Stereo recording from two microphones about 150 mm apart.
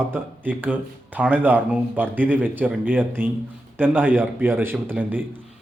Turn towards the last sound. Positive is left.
turn(degrees=-10)  # may be behind; listen again after turning